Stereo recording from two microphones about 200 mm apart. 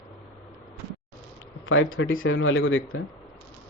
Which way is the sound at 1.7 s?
90° left.